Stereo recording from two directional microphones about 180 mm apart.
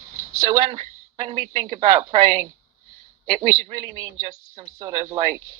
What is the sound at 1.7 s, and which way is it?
Speech, 25° right (ahead or behind).